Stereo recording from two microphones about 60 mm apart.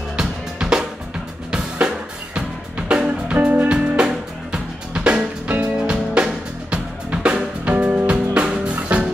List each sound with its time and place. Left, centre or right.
0.1 s drum: centre
2.9 s music: centre